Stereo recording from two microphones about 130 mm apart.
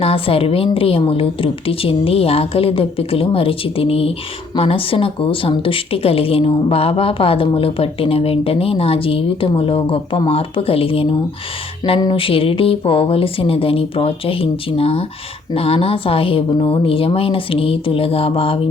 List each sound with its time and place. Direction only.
0.0 s speech: 45° left (ahead or behind)